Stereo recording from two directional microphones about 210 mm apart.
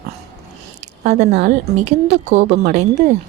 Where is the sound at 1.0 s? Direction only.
30° right (ahead or behind).